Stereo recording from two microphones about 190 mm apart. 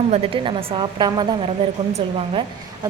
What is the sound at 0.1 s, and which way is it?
Speech, 30° right (ahead or behind).